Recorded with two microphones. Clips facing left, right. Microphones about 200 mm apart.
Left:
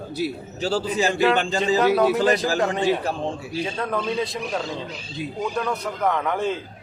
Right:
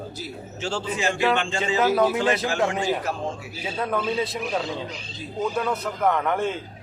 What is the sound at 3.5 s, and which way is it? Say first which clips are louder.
A man's voice: even; 5° right (ahead or behind).